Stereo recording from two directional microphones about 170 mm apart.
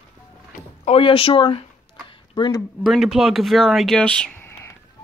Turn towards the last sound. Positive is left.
turn(degrees=10)  # may be behind; listen again after turning